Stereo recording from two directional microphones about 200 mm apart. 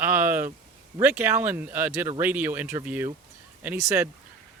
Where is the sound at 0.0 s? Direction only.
10° right (ahead or behind).